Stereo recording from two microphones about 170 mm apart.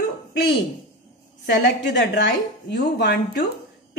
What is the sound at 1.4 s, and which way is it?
A woman's voice, 75° left (ahead or behind).